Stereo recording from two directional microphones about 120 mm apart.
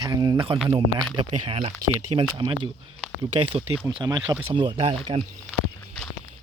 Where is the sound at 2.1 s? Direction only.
45° right (ahead or behind).